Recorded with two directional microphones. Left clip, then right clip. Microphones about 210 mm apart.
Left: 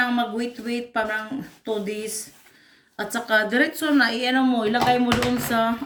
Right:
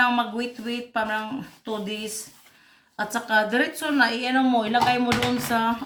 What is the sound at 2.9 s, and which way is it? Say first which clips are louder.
Speech: left 1 dB; 25° right (ahead or behind).